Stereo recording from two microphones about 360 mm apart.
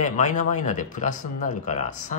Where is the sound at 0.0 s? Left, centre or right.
Centre.